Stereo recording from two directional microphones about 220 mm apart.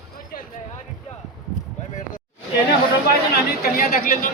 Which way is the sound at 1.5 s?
35° left (ahead or behind).